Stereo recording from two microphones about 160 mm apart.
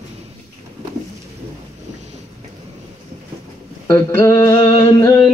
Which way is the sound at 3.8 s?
15° left (ahead or behind).